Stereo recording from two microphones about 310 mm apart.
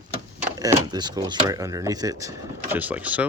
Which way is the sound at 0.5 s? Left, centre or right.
Centre.